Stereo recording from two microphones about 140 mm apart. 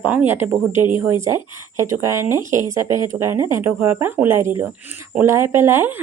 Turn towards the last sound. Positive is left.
turn(degrees=-15)  # may be behind; listen again after turning